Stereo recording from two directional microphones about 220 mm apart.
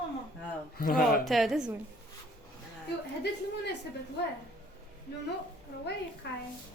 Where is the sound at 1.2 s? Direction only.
Centre (ahead or behind).